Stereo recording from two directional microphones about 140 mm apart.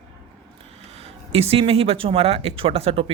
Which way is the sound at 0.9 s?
50° right (ahead or behind).